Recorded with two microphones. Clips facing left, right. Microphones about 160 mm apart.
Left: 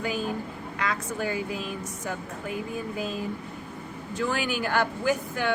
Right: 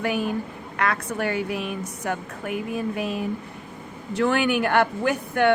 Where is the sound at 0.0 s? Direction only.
65° right (ahead or behind).